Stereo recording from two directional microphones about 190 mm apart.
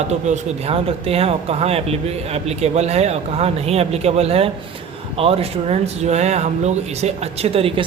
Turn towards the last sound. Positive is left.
turn(degrees=-30)  # may be behind; listen again after turning